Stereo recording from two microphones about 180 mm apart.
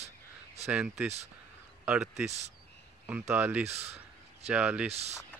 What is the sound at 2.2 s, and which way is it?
Speech, 35° right (ahead or behind).